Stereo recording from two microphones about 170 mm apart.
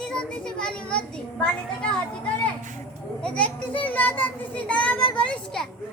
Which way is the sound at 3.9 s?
10° left (ahead or behind).